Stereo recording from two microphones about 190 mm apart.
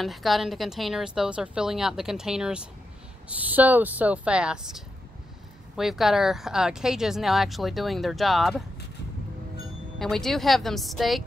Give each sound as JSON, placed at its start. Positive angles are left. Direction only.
{"t": 0.0, "sound": "speech", "side_deg": 0}
{"t": 9.9, "sound": "speech", "side_deg": 0}